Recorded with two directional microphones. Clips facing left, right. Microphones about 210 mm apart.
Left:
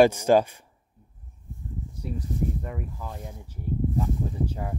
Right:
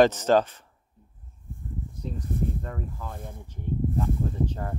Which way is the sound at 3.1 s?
55° right (ahead or behind).